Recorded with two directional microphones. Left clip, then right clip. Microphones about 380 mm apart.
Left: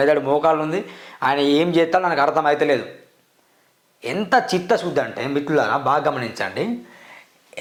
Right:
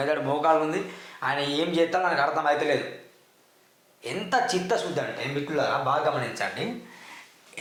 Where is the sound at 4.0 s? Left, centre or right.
Left.